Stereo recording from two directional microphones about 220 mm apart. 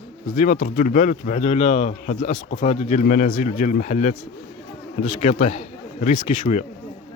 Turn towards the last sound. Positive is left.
turn(degrees=35)  # may be behind; listen again after turning